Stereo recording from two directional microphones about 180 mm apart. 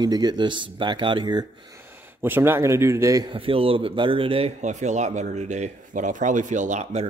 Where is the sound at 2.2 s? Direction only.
10° right (ahead or behind).